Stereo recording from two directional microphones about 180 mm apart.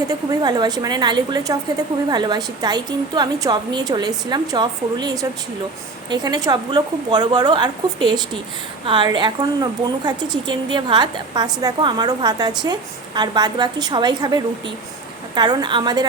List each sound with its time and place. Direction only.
0.1 s a woman's voice: 20° right (ahead or behind)